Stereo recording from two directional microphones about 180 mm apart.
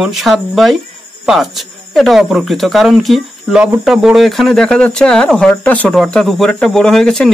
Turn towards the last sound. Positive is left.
turn(degrees=5)  # may be behind; listen again after turning